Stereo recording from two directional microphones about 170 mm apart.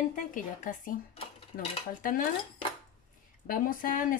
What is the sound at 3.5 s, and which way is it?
Speech, 55° left (ahead or behind).